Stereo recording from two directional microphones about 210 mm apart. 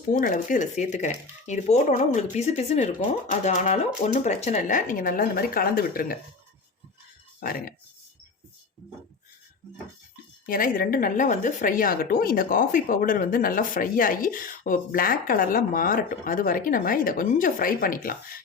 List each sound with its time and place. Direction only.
0.1 s a woman's voice: 40° left (ahead or behind)
7.3 s speech: 45° left (ahead or behind)
10.4 s a woman's voice: 40° left (ahead or behind)